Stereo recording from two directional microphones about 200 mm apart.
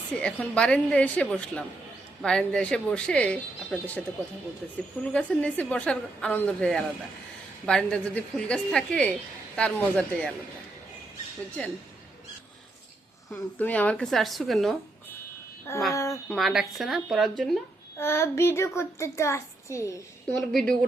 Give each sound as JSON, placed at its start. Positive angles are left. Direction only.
{"t": 0.1, "sound": "a child's voice", "side_deg": 5}
{"t": 5.1, "sound": "speech", "side_deg": 5}
{"t": 13.3, "sound": "speech", "side_deg": 10}
{"t": 15.9, "sound": "a child's voice", "side_deg": 15}
{"t": 16.3, "sound": "speech", "side_deg": 0}
{"t": 18.0, "sound": "a child's voice", "side_deg": 10}
{"t": 20.3, "sound": "speech", "side_deg": 0}